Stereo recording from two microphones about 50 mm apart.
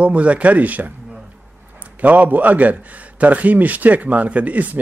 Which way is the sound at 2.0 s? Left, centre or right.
Right.